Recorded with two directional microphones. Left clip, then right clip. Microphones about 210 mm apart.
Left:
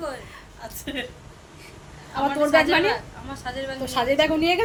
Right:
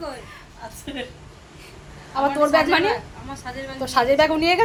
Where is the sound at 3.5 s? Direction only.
25° left (ahead or behind).